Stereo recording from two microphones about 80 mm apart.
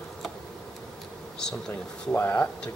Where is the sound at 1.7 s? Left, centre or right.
Left.